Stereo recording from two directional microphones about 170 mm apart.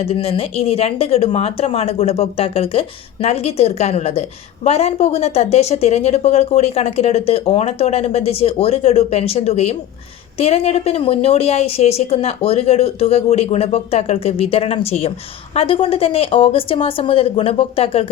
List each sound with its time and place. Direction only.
0.0 s speech: 35° left (ahead or behind)